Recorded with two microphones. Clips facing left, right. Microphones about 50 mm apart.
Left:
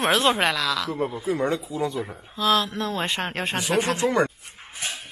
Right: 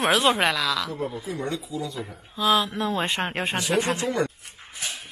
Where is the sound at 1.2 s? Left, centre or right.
Left.